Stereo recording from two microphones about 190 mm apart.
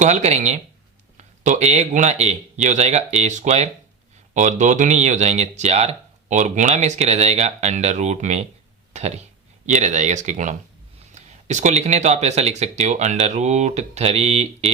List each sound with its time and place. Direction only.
0.0 s speech: 35° right (ahead or behind)
8.9 s a sound: 35° right (ahead or behind)
9.6 s speech: 40° right (ahead or behind)